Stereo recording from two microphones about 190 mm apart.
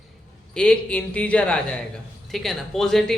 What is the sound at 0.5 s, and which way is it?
A man's voice, 5° left (ahead or behind).